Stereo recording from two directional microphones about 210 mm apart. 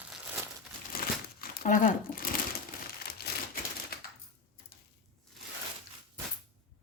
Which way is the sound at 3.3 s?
50° left (ahead or behind).